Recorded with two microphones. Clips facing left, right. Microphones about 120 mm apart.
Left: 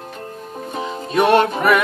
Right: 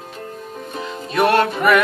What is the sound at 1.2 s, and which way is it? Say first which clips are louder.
Music: left 1 dB; 20° left (ahead or behind).